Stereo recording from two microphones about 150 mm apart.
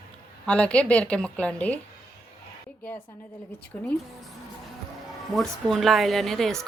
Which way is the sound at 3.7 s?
25° left (ahead or behind).